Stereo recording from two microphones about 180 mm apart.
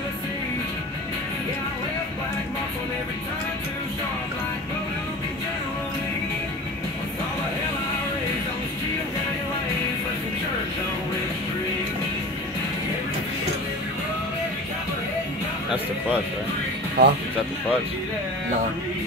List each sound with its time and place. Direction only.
17.0 s speech: 60° right (ahead or behind)